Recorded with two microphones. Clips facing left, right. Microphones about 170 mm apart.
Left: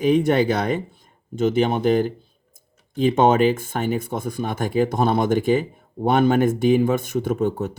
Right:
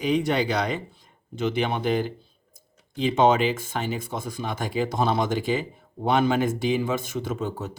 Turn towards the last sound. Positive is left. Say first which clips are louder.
# left 7 dB
turn(degrees=55)  # may be behind; listen again after turning